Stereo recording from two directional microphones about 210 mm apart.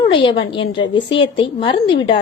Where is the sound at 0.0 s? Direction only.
20° left (ahead or behind).